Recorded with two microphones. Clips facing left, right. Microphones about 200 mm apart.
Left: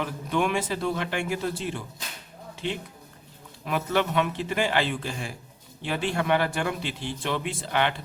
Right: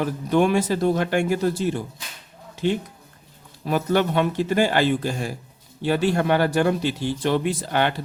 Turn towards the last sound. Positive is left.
turn(degrees=-40)  # may be behind; listen again after turning